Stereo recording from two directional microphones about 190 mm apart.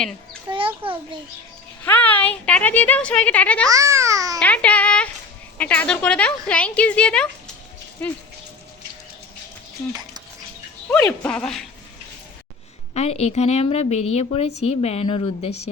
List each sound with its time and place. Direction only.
0.5 s a sound: 20° right (ahead or behind)
1.8 s speech: 10° left (ahead or behind)
3.7 s babbling: 15° right (ahead or behind)
4.4 s speech: 5° left (ahead or behind)
9.9 s a sound: 20° right (ahead or behind)
10.9 s speech: 5° left (ahead or behind)
12.9 s a woman's voice: 35° left (ahead or behind)